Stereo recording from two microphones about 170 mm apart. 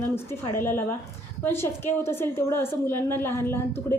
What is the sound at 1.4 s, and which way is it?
A woman's voice, 15° left (ahead or behind).